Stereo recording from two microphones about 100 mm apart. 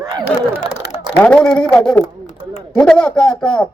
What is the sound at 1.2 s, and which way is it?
A man's voice, 10° left (ahead or behind).